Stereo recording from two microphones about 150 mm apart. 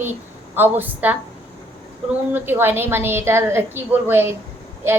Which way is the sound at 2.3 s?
15° right (ahead or behind).